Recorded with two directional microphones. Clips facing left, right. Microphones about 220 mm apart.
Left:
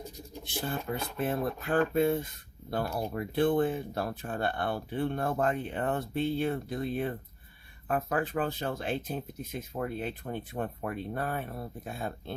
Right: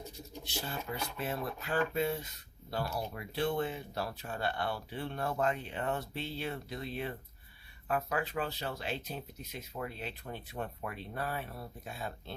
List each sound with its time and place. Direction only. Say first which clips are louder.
0.4 s speech: left 6 dB; 55° left (ahead or behind)